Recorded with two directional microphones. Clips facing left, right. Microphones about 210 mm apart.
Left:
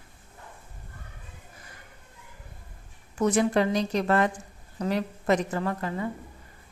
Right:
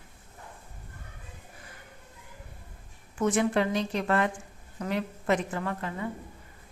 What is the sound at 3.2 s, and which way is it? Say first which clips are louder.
A woman's voice: left 2 dB; 40° left (ahead or behind).